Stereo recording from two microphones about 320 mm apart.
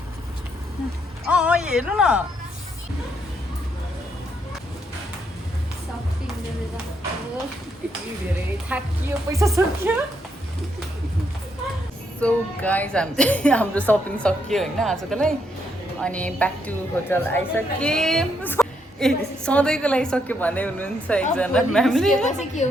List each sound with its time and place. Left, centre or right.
1.3 s a woman's voice: centre
8.7 s speech: centre
12.2 s a woman's voice: centre
22.1 s a woman's voice: left